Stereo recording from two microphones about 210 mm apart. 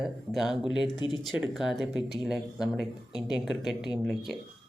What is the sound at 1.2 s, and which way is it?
Speech, centre (ahead or behind).